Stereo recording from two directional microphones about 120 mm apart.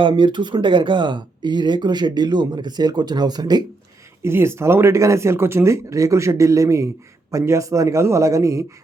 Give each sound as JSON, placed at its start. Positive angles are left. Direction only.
{"t": 0.0, "sound": "speech", "side_deg": -40}
{"t": 4.2, "sound": "speech", "side_deg": -20}